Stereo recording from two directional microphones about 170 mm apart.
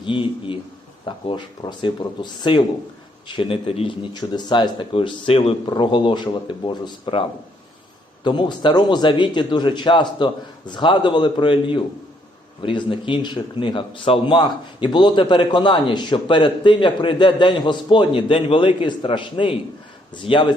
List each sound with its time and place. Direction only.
0.0 s a man's voice: 30° left (ahead or behind)